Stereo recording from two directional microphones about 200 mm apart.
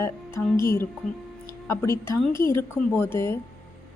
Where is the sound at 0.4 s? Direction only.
10° left (ahead or behind).